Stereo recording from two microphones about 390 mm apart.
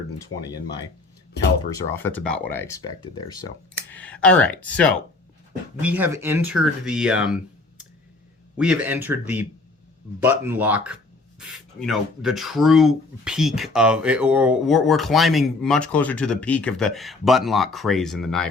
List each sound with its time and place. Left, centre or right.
0.3 s speech: left
1.9 s speech: centre
3.9 s speech: centre
8.5 s speech: centre